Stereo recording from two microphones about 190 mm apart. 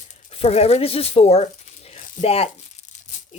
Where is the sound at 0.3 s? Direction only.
30° left (ahead or behind).